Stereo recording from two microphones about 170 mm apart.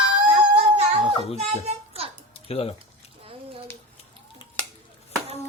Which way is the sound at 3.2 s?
35° right (ahead or behind).